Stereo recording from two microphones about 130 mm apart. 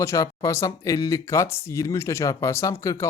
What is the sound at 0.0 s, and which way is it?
Speech, 25° left (ahead or behind).